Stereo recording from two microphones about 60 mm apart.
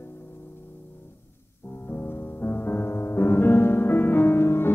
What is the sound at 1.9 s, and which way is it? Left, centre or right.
Music, left.